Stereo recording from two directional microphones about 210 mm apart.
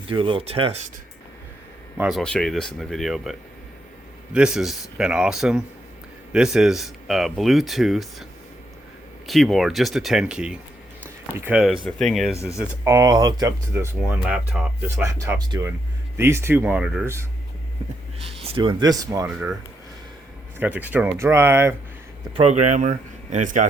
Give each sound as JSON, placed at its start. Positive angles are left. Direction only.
{"t": 0.1, "sound": "speech", "side_deg": -25}
{"t": 2.0, "sound": "speech", "side_deg": 0}
{"t": 12.8, "sound": "speech", "side_deg": -15}
{"t": 14.1, "sound": "speech", "side_deg": -5}
{"t": 15.0, "sound": "speech", "side_deg": -15}
{"t": 18.4, "sound": "speech", "side_deg": -25}
{"t": 20.6, "sound": "speech", "side_deg": -10}
{"t": 22.4, "sound": "speech", "side_deg": -30}